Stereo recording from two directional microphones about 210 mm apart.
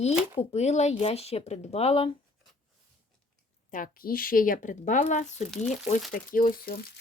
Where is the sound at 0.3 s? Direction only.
30° left (ahead or behind).